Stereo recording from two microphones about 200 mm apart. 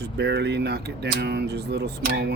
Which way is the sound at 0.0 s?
55° right (ahead or behind).